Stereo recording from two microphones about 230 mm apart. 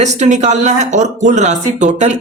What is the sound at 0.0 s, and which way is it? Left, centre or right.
Speech, right.